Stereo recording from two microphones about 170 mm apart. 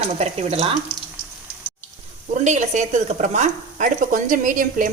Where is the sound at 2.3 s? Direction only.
45° right (ahead or behind).